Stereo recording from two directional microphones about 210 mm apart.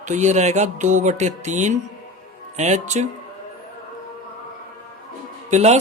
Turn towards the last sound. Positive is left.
turn(degrees=-35)  # may be behind; listen again after turning